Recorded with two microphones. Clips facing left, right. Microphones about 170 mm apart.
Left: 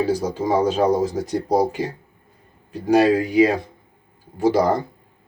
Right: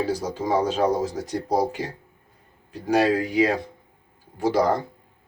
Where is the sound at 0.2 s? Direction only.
10° left (ahead or behind).